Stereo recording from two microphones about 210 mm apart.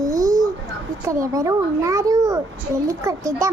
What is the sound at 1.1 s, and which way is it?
A child's voice, 15° right (ahead or behind).